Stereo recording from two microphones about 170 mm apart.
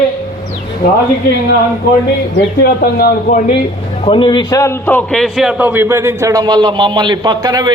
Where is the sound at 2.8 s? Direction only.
60° left (ahead or behind).